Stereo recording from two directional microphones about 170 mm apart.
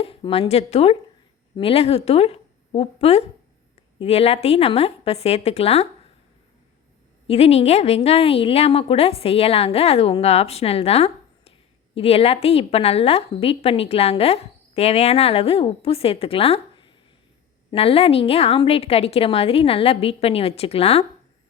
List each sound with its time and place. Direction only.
0.0 s a woman's voice: 35° left (ahead or behind)
7.3 s a woman's voice: 35° left (ahead or behind)